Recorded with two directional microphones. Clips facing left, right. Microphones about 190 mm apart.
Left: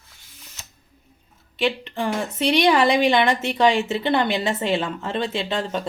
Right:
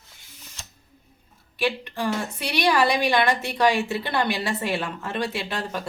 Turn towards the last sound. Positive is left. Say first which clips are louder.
# left 4 dB
turn(degrees=25)  # may be behind; listen again after turning